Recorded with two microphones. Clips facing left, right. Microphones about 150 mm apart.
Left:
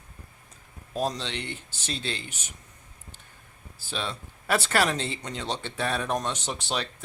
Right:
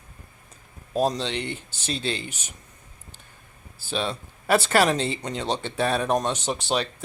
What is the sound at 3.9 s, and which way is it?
Speech, 30° right (ahead or behind).